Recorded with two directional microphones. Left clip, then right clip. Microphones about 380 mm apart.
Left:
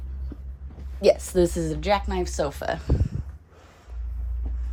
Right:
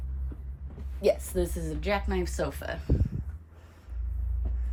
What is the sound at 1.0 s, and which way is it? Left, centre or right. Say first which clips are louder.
Speech: left 7 dB; left.